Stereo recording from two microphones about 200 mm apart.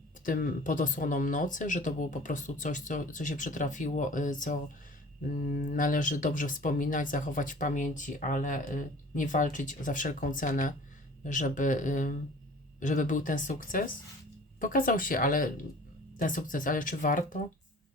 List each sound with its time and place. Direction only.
0.3 s speech: 45° left (ahead or behind)